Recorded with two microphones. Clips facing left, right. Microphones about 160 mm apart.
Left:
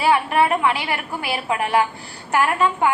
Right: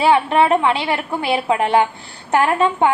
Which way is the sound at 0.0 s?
25° right (ahead or behind).